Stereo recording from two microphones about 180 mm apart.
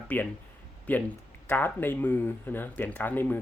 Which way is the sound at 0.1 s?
10° left (ahead or behind).